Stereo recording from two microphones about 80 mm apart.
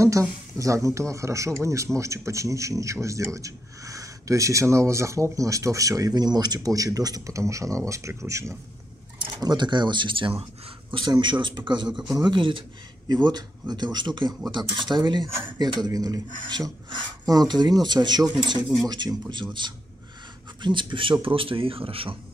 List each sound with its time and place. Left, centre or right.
0.0 s a man's voice: right
9.2 s a man's voice: right
13.1 s speech: right
18.9 s speech: right
20.6 s speech: right